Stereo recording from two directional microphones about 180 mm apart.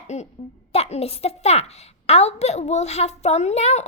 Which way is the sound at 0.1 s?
40° left (ahead or behind).